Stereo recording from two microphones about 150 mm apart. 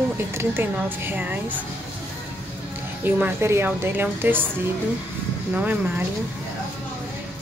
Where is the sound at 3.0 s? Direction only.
10° right (ahead or behind).